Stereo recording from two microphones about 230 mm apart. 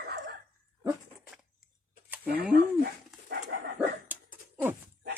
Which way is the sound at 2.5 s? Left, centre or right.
Right.